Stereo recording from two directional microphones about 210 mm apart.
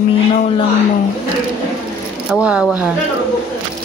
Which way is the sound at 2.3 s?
5° right (ahead or behind).